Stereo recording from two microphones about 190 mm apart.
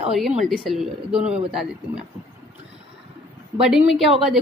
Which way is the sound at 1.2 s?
35° right (ahead or behind).